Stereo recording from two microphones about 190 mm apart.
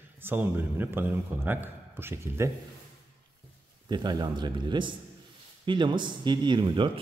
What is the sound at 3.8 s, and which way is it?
Speech, 20° right (ahead or behind).